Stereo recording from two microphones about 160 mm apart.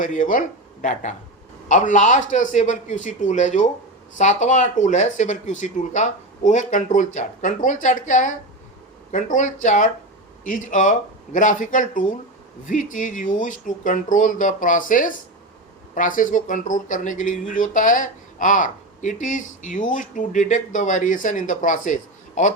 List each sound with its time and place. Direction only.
0.0 s speech: 55° left (ahead or behind)